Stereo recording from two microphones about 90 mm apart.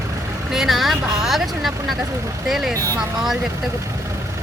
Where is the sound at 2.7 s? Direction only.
40° right (ahead or behind).